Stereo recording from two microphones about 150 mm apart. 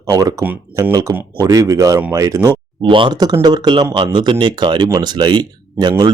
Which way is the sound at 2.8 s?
35° right (ahead or behind).